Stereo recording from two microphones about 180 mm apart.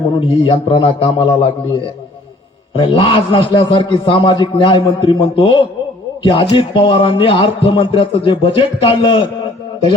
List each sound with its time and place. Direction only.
0.4 s speech: 30° left (ahead or behind)